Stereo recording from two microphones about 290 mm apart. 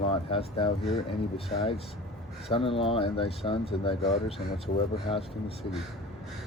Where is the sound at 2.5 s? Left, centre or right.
Centre.